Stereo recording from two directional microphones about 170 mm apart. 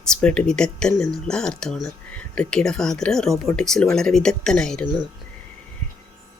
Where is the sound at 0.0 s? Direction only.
5° left (ahead or behind).